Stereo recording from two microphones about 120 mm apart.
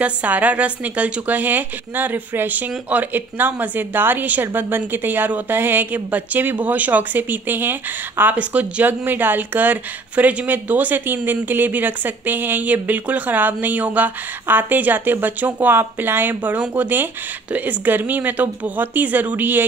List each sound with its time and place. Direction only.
0.0 s speech: 10° right (ahead or behind)